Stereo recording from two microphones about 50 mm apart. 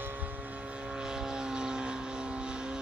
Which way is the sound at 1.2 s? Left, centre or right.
Centre.